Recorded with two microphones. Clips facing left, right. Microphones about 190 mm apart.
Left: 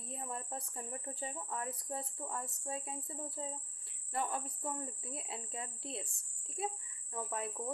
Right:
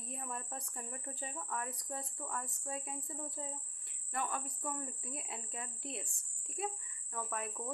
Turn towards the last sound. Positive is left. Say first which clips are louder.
# left 1 dB
turn(degrees=25)  # may be behind; listen again after turning